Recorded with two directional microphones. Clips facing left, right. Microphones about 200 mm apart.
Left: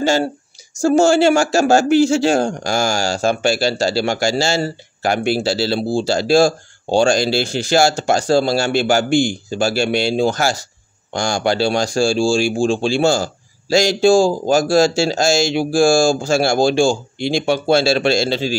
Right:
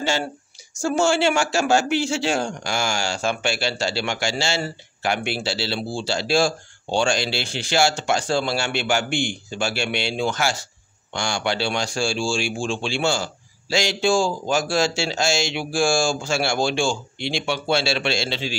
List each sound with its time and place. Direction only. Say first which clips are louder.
0.0 s a woman's voice: left 8 dB; 40° left (ahead or behind)